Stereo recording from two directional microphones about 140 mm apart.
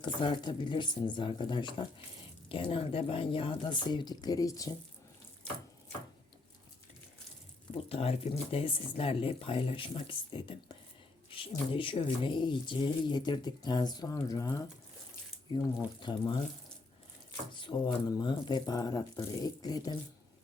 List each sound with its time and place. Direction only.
0.0 s speech: 35° left (ahead or behind)
7.9 s speech: 45° left (ahead or behind)
17.5 s speech: 35° left (ahead or behind)